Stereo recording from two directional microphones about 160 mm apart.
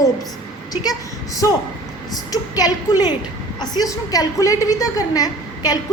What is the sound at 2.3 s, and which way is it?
A woman's voice, 25° left (ahead or behind).